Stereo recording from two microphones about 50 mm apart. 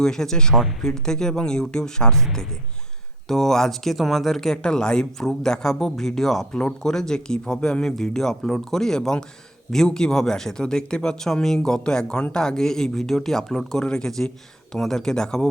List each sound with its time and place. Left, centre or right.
0.0 s speech: centre
3.2 s speech: centre